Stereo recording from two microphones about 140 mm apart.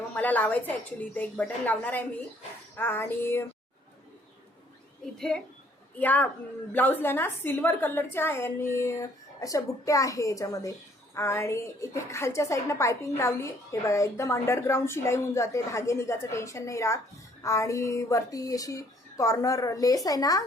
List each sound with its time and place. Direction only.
0.1 s a woman's voice: 10° left (ahead or behind)
5.1 s a woman's voice: 5° left (ahead or behind); by 20.4 s 25° left (ahead or behind)